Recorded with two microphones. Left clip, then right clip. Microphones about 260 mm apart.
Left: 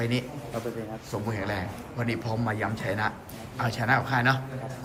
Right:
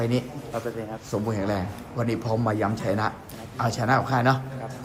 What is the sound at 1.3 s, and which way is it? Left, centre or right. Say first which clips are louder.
A man's voice: right 2 dB; centre.